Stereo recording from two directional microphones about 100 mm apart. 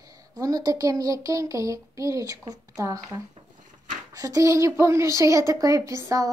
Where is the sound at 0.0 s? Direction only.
35° right (ahead or behind).